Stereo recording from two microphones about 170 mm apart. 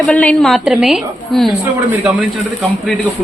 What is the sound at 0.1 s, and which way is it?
A woman's voice, 5° left (ahead or behind).